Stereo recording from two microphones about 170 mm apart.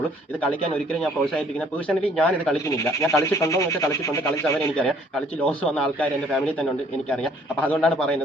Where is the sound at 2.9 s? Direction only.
15° left (ahead or behind).